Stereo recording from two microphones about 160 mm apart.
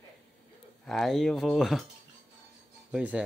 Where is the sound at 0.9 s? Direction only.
Centre (ahead or behind).